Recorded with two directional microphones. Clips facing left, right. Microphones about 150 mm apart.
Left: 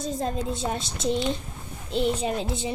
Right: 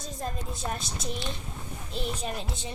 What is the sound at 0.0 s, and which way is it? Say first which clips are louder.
A woman's voice: left 8 dB; 25° left (ahead or behind).